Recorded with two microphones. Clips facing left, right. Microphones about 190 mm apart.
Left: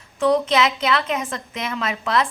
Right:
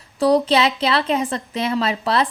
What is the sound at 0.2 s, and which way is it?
A woman's voice, 35° right (ahead or behind).